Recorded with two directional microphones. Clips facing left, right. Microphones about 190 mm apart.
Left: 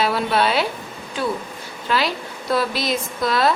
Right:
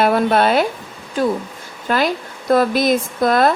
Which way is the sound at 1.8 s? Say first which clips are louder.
Right 4 dB; 50° right (ahead or behind).